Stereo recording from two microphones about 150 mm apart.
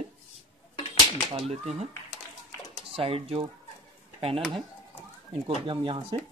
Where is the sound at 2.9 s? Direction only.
40° right (ahead or behind).